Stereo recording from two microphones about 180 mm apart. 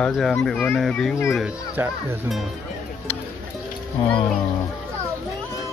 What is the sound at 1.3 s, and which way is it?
Speech, 10° right (ahead or behind).